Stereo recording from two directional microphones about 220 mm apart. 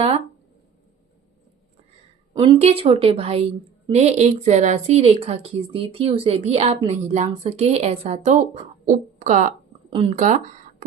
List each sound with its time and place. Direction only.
2.3 s speech: 25° right (ahead or behind)